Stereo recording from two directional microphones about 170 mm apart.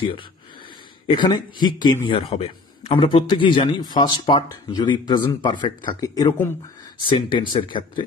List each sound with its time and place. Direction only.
1.0 s a man's voice: 25° left (ahead or behind)